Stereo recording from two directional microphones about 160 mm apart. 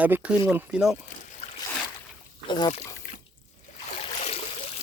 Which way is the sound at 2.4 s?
25° left (ahead or behind).